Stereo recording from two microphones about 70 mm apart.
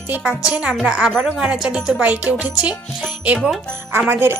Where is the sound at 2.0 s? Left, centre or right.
Right.